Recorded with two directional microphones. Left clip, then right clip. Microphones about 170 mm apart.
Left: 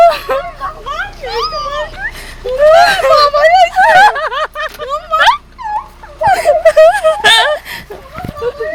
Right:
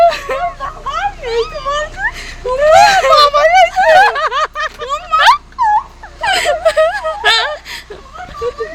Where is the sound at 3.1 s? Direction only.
20° right (ahead or behind).